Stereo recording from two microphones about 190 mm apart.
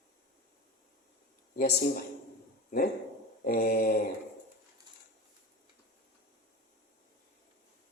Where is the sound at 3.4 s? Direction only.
45° left (ahead or behind).